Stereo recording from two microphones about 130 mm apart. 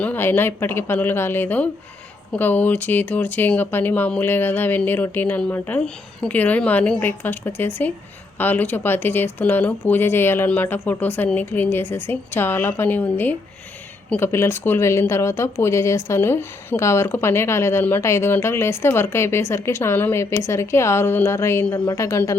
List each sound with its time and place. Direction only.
0.0 s speech: 15° left (ahead or behind)